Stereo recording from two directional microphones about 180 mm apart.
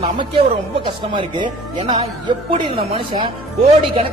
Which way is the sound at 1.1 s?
25° right (ahead or behind).